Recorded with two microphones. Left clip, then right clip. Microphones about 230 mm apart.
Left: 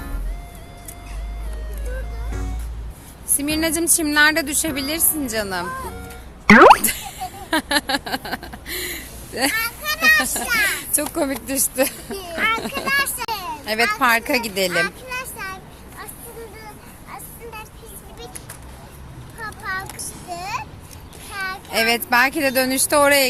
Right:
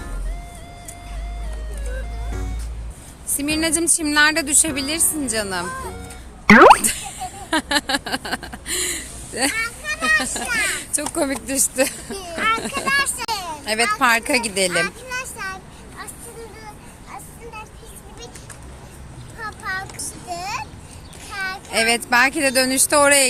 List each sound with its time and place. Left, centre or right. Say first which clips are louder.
2.3 s music: left 1 dB; centre
3.3 s a sound: even; centre
9.6 s children playing: left 1 dB; left
10.6 s speech: left 2 dB; centre
12.6 s a sound: right 1 dB; centre
17.1 s vehicle: left 1 dB; centre
19.4 s boat: even; centre
20.1 s a sound: right 1 dB; centre
21.3 s a child's voice: even; centre